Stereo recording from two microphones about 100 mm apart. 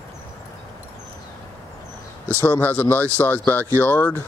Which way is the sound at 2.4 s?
20° left (ahead or behind).